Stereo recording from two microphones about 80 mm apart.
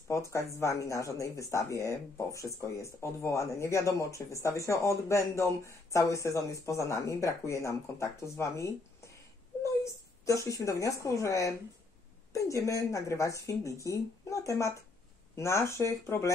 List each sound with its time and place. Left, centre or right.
0.1 s speech: left
10.2 s speech: left